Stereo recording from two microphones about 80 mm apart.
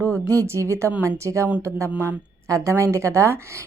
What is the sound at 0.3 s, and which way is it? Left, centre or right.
Speech, right.